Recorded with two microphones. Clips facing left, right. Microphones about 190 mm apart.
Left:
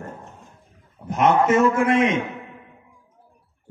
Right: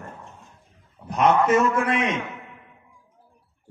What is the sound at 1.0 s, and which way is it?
A man's voice, 25° left (ahead or behind).